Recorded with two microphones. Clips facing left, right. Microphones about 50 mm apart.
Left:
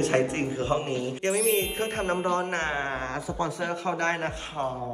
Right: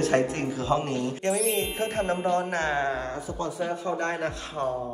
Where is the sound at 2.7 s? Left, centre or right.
Left.